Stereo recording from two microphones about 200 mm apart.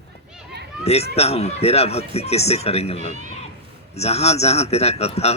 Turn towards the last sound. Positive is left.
turn(degrees=30)  # may be behind; listen again after turning